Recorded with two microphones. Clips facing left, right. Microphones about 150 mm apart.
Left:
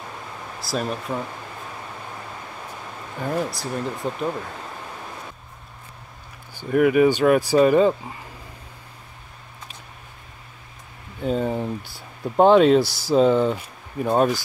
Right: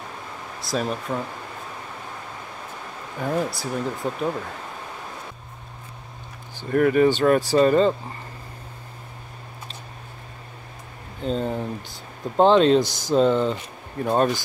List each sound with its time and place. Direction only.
0.6 s speech: centre (ahead or behind)
3.2 s speech: centre (ahead or behind)
6.7 s speech: 10° left (ahead or behind)
11.2 s speech: 10° left (ahead or behind)